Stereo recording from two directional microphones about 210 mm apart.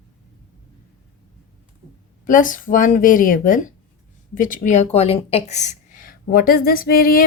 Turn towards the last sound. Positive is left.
turn(degrees=45)  # may be behind; listen again after turning